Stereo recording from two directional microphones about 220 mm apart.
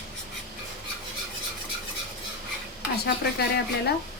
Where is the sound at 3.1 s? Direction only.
50° left (ahead or behind).